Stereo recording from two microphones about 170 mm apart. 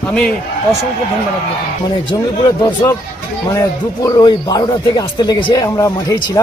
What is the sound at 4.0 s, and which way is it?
Speech, 25° left (ahead or behind).